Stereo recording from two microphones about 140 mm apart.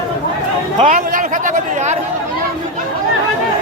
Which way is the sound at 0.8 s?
70° right (ahead or behind).